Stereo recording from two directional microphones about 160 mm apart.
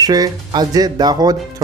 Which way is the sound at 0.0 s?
25° right (ahead or behind).